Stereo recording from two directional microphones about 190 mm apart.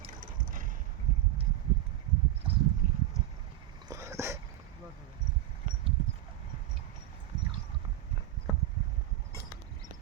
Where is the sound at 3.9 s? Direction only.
15° right (ahead or behind).